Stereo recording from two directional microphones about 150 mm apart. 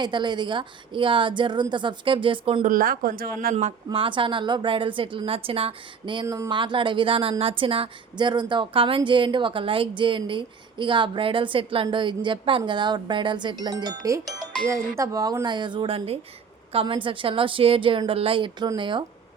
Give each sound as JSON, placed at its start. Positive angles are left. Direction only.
{"t": 0.0, "sound": "a woman's voice", "side_deg": -30}
{"t": 2.6, "sound": "speech", "side_deg": -70}
{"t": 3.5, "sound": "speech", "side_deg": -50}
{"t": 3.8, "sound": "a woman's voice", "side_deg": -35}
{"t": 6.2, "sound": "speech", "side_deg": -20}
{"t": 6.5, "sound": "a woman's voice", "side_deg": -30}